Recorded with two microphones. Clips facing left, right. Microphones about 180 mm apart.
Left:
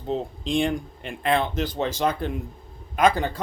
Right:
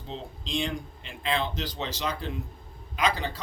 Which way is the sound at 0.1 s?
55° left (ahead or behind).